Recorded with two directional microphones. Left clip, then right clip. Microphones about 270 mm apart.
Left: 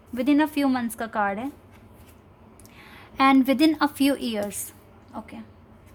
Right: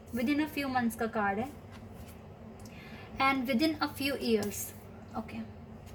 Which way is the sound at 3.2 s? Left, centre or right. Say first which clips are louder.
Left 10 dB; left.